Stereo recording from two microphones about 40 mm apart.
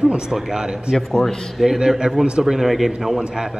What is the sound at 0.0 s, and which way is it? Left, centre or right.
Speech, centre.